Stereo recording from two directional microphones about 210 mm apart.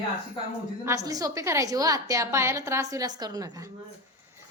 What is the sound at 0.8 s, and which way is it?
A woman's voice, 15° right (ahead or behind).